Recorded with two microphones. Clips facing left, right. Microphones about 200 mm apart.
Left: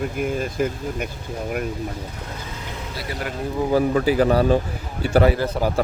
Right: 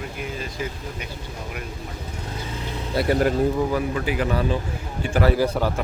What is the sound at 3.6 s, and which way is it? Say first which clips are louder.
Speech: left 6 dB; 35° left (ahead or behind).